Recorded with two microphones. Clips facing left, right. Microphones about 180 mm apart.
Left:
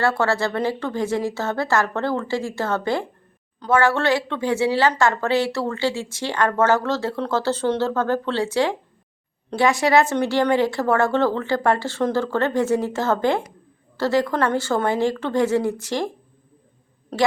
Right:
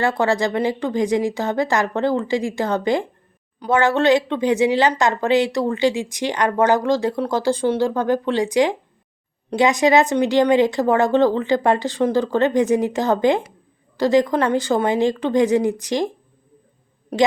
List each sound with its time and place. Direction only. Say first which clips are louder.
0.0 s a woman's voice: right 2 dB; 15° right (ahead or behind)
17.1 s a woman's voice: right 3 dB; 10° right (ahead or behind)